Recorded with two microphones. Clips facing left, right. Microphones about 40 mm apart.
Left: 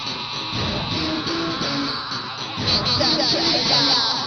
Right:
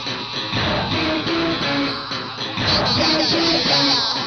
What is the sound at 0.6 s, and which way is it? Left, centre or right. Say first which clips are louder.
Music: right 5 dB; right.